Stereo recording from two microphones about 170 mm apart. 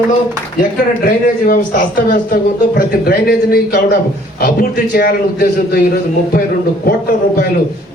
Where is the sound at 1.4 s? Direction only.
55° left (ahead or behind).